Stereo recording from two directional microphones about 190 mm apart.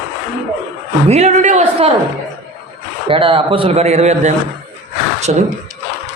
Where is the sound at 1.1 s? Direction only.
40° right (ahead or behind).